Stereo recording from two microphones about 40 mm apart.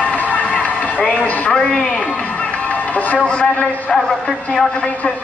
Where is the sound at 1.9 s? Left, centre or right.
Left.